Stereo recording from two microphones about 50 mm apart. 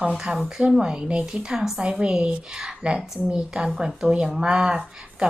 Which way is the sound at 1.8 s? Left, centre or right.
Right.